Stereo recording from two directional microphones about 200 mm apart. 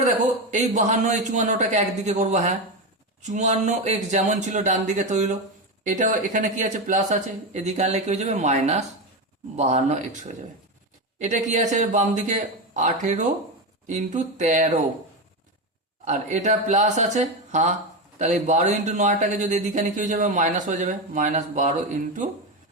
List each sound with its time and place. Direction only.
0.5 s speech: 35° right (ahead or behind)
16.0 s speech: 35° right (ahead or behind)